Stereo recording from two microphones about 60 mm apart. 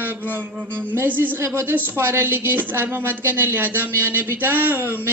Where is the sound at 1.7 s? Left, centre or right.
Right.